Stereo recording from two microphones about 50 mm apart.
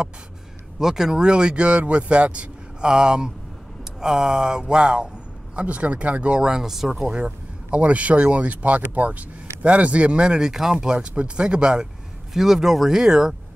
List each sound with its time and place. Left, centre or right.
0.7 s speech: centre
7.1 s speech: right
12.4 s speech: centre